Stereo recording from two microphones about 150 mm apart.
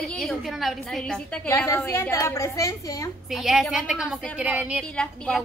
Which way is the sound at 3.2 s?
Centre (ahead or behind).